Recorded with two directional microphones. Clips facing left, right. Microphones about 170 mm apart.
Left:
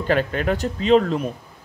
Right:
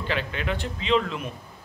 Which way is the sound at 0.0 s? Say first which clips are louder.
Left 8 dB; 45° left (ahead or behind).